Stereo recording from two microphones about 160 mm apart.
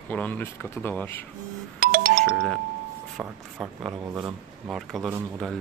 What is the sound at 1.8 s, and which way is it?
Music, 65° right (ahead or behind).